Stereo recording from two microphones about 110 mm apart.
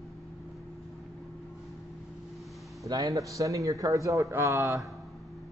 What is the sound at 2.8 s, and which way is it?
A man's voice, 30° right (ahead or behind).